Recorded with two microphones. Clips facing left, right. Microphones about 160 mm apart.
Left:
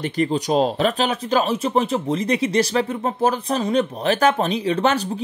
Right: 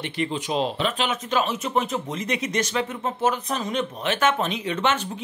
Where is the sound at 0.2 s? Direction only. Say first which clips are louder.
Left 6 dB; 40° left (ahead or behind).